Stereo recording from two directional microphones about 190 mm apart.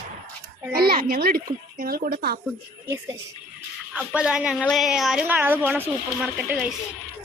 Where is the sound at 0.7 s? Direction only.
50° right (ahead or behind).